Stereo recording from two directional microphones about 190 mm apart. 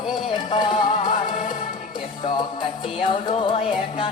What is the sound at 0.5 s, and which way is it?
Music, 25° left (ahead or behind).